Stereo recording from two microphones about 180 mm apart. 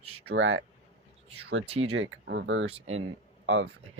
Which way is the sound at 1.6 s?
35° right (ahead or behind).